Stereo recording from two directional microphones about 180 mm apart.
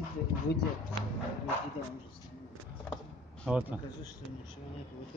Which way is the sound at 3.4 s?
5° right (ahead or behind).